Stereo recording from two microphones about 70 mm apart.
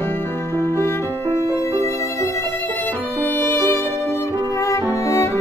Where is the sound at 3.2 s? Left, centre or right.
Left.